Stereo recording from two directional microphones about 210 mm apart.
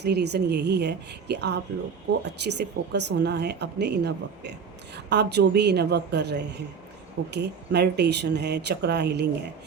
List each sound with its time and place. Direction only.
0.0 s a woman's voice: 50° right (ahead or behind)